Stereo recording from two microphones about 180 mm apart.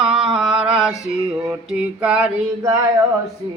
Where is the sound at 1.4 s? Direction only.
5° right (ahead or behind).